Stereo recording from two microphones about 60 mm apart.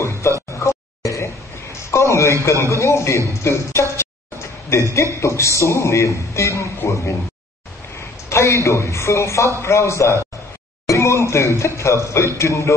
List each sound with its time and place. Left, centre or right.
0.2 s a sound: left
2.4 s a man's voice: left
8.3 s a man's voice: left